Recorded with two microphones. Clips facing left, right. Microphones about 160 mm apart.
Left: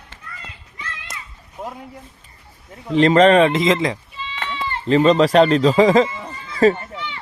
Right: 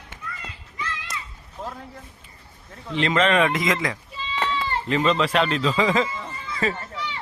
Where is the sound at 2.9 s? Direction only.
40° left (ahead or behind).